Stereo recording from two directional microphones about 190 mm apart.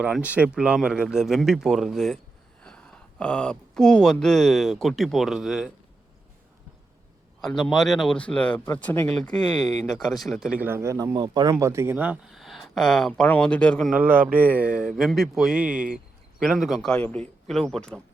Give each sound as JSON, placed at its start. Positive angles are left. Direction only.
{"t": 0.0, "sound": "speech", "side_deg": -5}
{"t": 7.4, "sound": "speech", "side_deg": 0}
{"t": 9.5, "sound": "speech", "side_deg": 20}
{"t": 10.1, "sound": "speech", "side_deg": 0}
{"t": 13.9, "sound": "speech", "side_deg": -10}